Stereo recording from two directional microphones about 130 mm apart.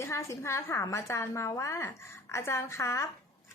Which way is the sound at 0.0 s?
20° left (ahead or behind).